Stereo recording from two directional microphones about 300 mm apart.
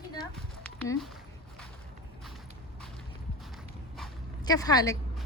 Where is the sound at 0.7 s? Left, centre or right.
Centre.